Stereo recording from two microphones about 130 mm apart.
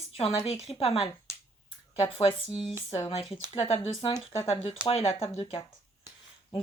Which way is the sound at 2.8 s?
50° left (ahead or behind).